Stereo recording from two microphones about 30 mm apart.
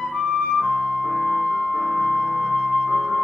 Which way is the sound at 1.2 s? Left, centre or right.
Centre.